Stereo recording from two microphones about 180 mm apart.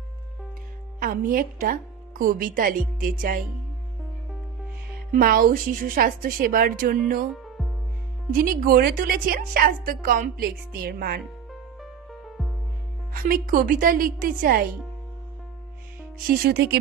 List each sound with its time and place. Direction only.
0.9 s a woman's voice: 50° right (ahead or behind)
5.1 s a woman's voice: 50° right (ahead or behind)
8.3 s a woman's voice: 50° right (ahead or behind)
13.1 s a woman's voice: 50° right (ahead or behind)
16.3 s speech: 60° right (ahead or behind)